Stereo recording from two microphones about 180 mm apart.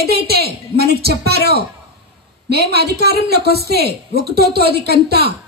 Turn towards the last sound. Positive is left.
turn(degrees=-60)  # may be behind; listen again after turning